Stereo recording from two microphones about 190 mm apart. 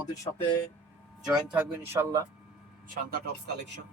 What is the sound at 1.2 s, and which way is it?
Speech, 5° right (ahead or behind).